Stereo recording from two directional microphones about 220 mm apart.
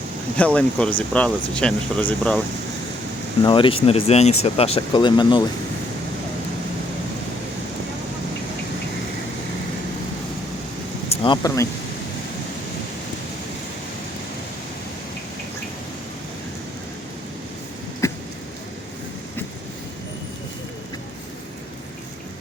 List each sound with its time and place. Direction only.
0.3 s speech: 5° left (ahead or behind)
3.4 s speech: 20° left (ahead or behind)
11.1 s speech: 20° left (ahead or behind)
18.0 s a sound: 15° left (ahead or behind)